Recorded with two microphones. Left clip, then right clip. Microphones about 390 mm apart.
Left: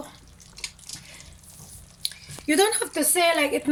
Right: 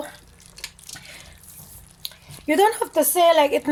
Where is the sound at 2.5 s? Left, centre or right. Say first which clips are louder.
Right 4 dB; centre.